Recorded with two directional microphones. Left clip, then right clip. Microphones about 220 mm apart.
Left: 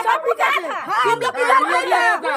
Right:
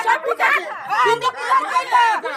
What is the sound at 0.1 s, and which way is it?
Chatter, 45° left (ahead or behind).